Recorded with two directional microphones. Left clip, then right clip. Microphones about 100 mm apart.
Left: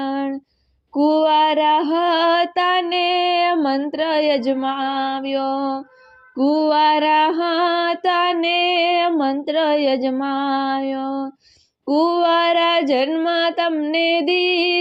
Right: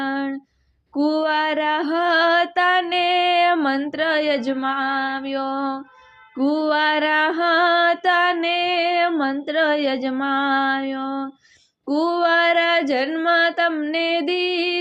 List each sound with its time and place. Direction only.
0.0 s a sound: 15° left (ahead or behind)
0.9 s female singing: 30° left (ahead or behind)
2.9 s music: 15° left (ahead or behind); by 5.8 s 30° left (ahead or behind)
6.3 s music: 15° left (ahead or behind)
11.9 s music: 30° left (ahead or behind)